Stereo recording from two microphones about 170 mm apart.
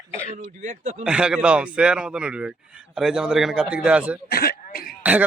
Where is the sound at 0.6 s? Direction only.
45° right (ahead or behind).